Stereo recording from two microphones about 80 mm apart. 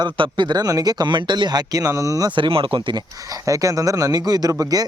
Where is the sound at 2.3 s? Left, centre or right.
Right.